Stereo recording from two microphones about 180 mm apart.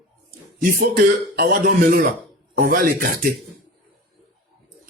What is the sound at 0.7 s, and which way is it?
Speech, 50° right (ahead or behind).